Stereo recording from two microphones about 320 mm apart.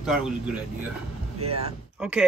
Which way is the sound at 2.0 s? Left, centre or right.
Centre.